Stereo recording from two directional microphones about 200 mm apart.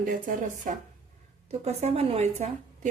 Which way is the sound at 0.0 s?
45° right (ahead or behind).